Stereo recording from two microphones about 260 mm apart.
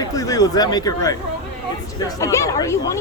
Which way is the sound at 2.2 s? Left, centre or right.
Centre.